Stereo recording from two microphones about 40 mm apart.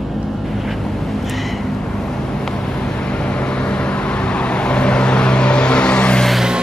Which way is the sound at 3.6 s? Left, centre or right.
Left.